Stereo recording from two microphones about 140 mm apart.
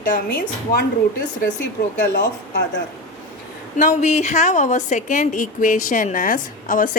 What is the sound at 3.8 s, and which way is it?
A woman's voice, 60° left (ahead or behind).